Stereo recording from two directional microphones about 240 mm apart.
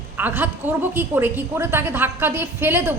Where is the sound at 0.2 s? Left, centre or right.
Centre.